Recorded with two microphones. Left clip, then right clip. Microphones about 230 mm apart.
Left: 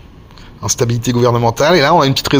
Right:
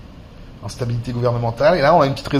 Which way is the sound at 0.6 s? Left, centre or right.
Left.